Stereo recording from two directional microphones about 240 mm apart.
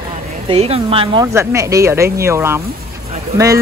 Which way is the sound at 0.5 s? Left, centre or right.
Right.